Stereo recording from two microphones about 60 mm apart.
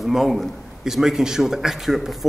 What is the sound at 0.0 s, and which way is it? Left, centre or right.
A man's voice, centre.